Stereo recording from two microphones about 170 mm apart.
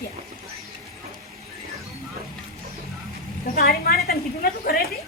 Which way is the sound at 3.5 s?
65° left (ahead or behind).